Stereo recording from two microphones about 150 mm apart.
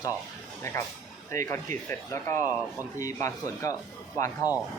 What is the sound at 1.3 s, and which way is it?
Speech, 20° left (ahead or behind).